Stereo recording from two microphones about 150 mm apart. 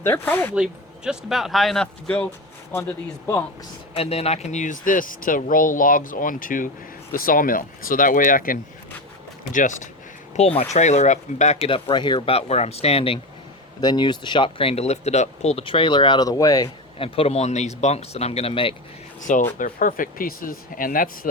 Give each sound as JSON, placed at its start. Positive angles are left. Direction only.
{"t": 0.0, "sound": "speech", "side_deg": 15}
{"t": 0.5, "sound": "speech", "side_deg": -5}
{"t": 3.9, "sound": "speech", "side_deg": 40}
{"t": 10.3, "sound": "speech", "side_deg": 45}
{"t": 11.7, "sound": "speech", "side_deg": 35}
{"t": 13.8, "sound": "speech", "side_deg": 30}
{"t": 17.0, "sound": "speech", "side_deg": 40}
{"t": 19.2, "sound": "speech", "side_deg": 65}